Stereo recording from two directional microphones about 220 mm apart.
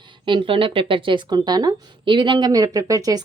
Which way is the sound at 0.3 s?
25° right (ahead or behind).